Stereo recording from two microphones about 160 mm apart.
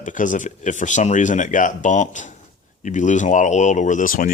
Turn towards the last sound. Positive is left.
turn(degrees=60)  # may be behind; listen again after turning